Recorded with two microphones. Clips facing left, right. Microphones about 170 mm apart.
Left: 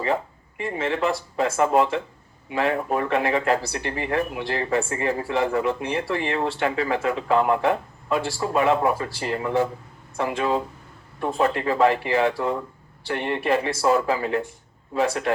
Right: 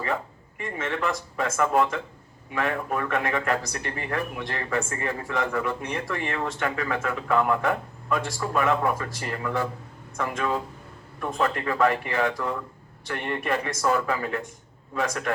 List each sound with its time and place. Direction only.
0.6 s a man's voice: 30° left (ahead or behind)